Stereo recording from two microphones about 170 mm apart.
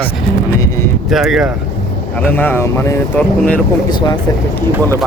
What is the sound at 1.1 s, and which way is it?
Speech, centre (ahead or behind).